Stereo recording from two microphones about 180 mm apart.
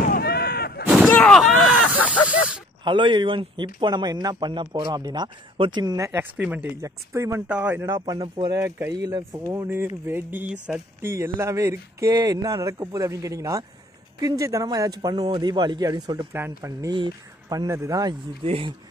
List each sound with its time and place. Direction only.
0.0 s artillery fire: 55° left (ahead or behind)
0.9 s a sound: 5° left (ahead or behind)
2.8 s speech: 25° right (ahead or behind); by 7.9 s 10° right (ahead or behind)
7.9 s speech: 20° right (ahead or behind)
18.4 s speech: 30° right (ahead or behind)